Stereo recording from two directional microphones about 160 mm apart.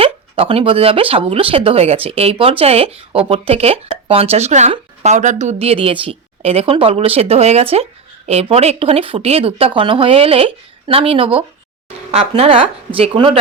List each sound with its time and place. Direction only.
0.0 s speech: 35° right (ahead or behind)